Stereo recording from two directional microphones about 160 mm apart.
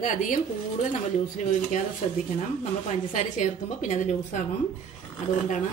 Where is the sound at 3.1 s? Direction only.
50° left (ahead or behind).